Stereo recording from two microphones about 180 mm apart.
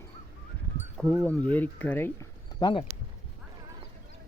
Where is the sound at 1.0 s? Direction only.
5° left (ahead or behind).